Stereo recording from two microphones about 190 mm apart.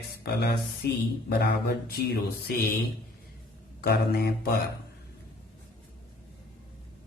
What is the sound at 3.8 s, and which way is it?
Speech, 55° left (ahead or behind).